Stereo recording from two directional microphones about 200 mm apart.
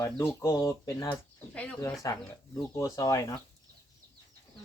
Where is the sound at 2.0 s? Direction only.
15° left (ahead or behind).